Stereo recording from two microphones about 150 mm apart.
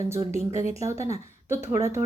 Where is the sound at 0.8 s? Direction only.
20° right (ahead or behind).